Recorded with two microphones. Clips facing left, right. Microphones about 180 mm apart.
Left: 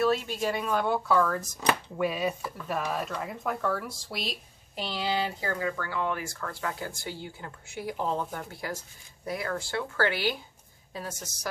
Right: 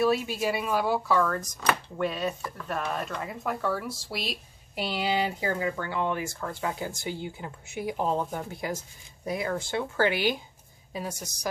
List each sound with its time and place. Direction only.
0.0 s speech: 10° right (ahead or behind)